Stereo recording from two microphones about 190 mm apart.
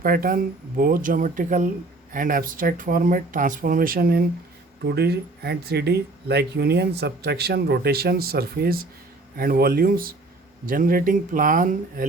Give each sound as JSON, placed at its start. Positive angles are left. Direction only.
{"t": 0.0, "sound": "speech", "side_deg": -50}